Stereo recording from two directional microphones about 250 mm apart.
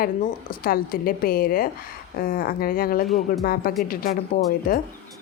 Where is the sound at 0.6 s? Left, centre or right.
Left.